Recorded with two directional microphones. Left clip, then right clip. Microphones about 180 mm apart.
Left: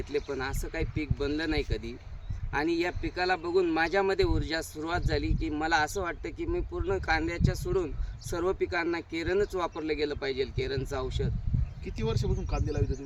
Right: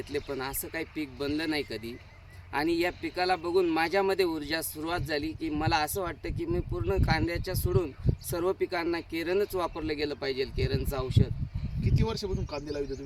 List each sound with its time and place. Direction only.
0.1 s speech: 15° right (ahead or behind)
11.9 s speech: 15° left (ahead or behind)